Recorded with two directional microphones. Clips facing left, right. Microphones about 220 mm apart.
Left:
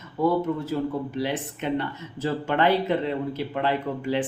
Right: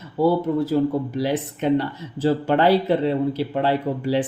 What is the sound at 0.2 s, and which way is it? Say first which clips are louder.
Speech: right 4 dB; 35° right (ahead or behind).